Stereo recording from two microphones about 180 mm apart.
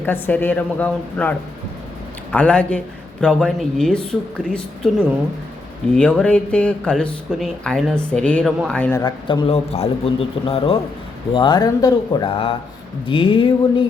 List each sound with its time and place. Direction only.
0.0 s a woman's voice: 10° left (ahead or behind)
5.9 s speech: 5° left (ahead or behind)
9.0 s a man's voice: 25° left (ahead or behind)